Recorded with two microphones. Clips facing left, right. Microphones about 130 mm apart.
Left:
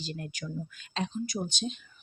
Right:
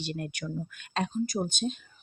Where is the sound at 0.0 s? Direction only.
60° right (ahead or behind).